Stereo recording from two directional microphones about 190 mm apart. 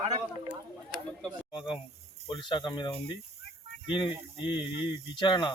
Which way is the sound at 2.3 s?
25° left (ahead or behind).